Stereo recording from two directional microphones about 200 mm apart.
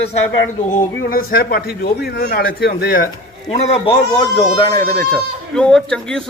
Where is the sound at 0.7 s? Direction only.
45° left (ahead or behind).